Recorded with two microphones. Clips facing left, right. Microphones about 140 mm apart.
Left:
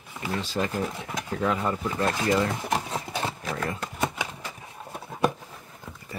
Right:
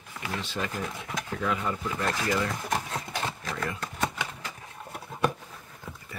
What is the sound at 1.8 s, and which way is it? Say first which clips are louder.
Speech: left 3 dB; 25° left (ahead or behind).